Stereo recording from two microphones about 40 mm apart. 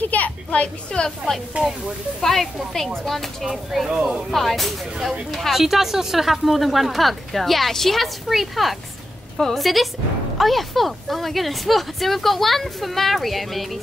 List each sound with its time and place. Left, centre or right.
0.0 s a woman's voice: left
0.5 s a woman's voice: left
1.0 s speech: centre
3.9 s speech: centre
4.3 s speech: centre